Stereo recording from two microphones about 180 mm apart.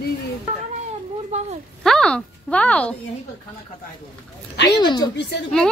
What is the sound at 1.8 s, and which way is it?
Speech, 5° left (ahead or behind).